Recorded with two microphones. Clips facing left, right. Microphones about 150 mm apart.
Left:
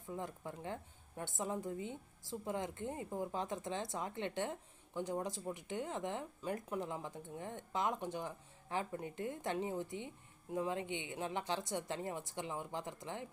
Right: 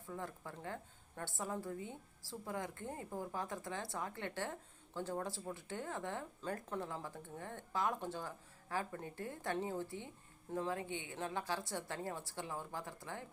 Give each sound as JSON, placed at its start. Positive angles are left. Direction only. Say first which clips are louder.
{"t": 0.1, "sound": "a woman's voice", "louder": "left 2 dB", "side_deg": 20}